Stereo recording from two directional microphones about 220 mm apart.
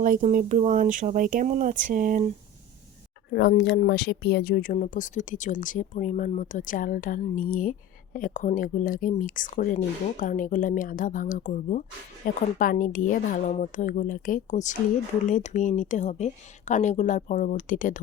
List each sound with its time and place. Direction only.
0.0 s speech: 35° right (ahead or behind)
3.2 s speech: 50° left (ahead or behind)